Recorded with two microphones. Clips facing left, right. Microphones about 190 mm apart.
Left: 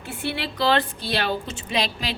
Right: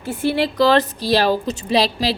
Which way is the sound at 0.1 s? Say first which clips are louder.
Right 10 dB; 40° right (ahead or behind).